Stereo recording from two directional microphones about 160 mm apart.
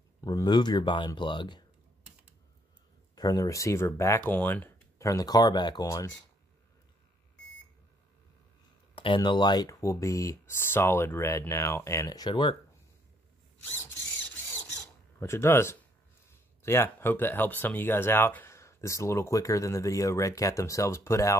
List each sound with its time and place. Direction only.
0.2 s speech: 25° left (ahead or behind)
3.2 s speech: 20° left (ahead or behind)
8.9 s speech: 30° left (ahead or behind)
13.7 s speech: 15° left (ahead or behind)
15.1 s speech: 15° left (ahead or behind)